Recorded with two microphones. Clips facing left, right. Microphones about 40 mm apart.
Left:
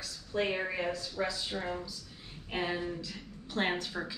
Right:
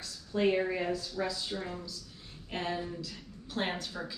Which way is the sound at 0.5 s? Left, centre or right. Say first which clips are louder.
Right 4 dB; centre.